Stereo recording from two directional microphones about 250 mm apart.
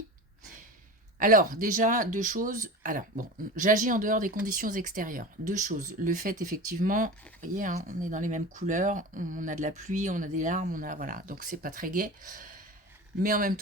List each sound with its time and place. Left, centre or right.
1.2 s speech: right